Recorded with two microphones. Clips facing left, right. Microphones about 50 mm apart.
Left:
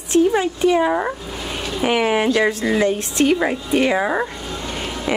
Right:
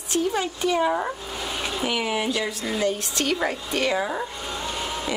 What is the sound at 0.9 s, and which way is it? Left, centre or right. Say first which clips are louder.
Speech: left 5 dB; left.